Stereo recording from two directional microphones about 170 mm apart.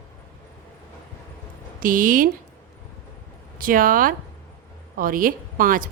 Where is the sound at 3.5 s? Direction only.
55° right (ahead or behind).